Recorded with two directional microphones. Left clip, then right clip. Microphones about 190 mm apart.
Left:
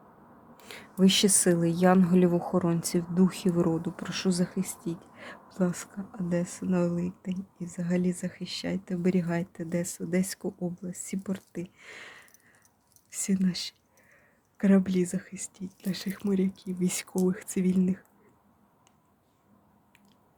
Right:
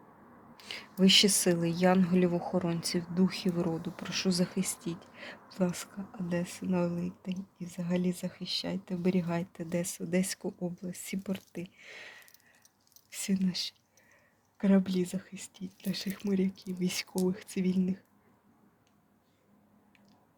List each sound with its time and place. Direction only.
0.5 s speech: 20° left (ahead or behind)